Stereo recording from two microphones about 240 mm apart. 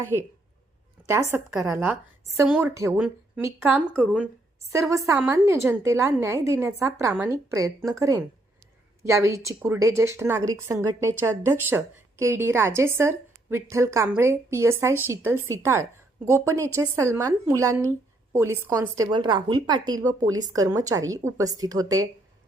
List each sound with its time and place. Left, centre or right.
0.0 s a woman's voice: centre